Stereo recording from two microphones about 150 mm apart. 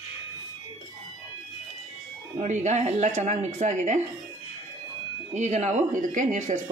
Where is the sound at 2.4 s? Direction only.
50° right (ahead or behind).